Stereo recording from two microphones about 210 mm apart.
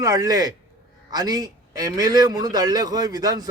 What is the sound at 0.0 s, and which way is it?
A man's voice, 15° right (ahead or behind).